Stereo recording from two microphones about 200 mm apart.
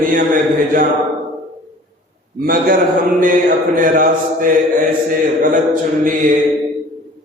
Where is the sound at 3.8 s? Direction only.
40° right (ahead or behind).